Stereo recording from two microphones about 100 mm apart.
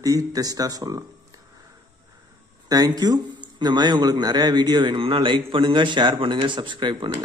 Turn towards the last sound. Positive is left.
turn(degrees=-55)  # may be behind; listen again after turning